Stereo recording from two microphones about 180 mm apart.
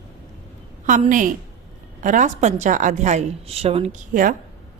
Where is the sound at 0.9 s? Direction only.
45° right (ahead or behind).